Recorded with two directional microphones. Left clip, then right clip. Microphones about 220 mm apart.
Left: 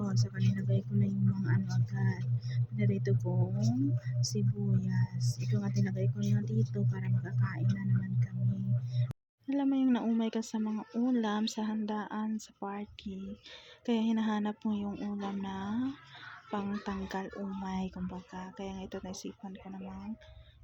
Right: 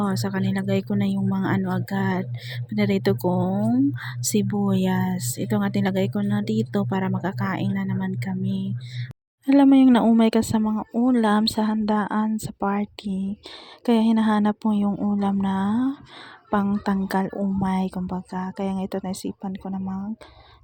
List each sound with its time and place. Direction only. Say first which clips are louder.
0.0 s speech: right 12 dB; 35° right (ahead or behind)